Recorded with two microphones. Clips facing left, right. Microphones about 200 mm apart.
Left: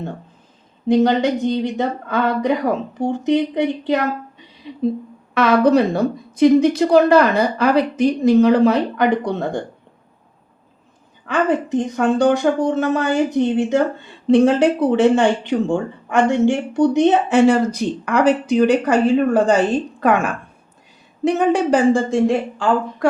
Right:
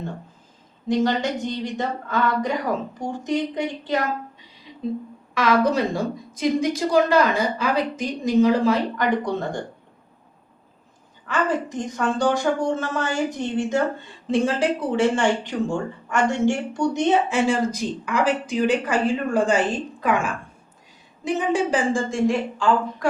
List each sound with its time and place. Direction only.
1.0 s a woman's voice: 60° left (ahead or behind)
4.7 s a sound: 60° left (ahead or behind)
5.3 s a woman's voice: 65° left (ahead or behind)
11.4 s a woman's voice: 60° left (ahead or behind)
20.0 s a woman's voice: 60° left (ahead or behind)